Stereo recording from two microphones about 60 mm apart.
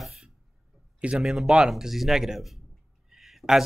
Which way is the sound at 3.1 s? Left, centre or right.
Centre.